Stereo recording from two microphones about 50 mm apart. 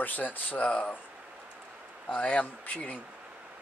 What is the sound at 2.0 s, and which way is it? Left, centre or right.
Speech, left.